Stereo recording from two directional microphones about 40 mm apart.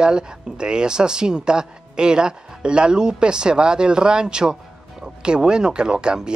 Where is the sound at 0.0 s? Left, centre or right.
Right.